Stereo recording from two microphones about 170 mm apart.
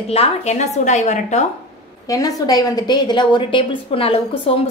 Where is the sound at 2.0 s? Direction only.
20° left (ahead or behind).